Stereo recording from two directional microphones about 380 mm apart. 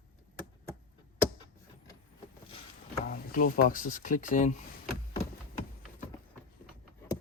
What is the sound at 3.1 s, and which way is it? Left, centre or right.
Speech, left.